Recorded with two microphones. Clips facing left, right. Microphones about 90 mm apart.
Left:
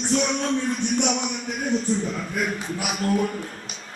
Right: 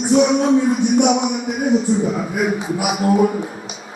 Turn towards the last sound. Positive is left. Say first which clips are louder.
# right 8 dB
turn(degrees=-10)  # may be behind; listen again after turning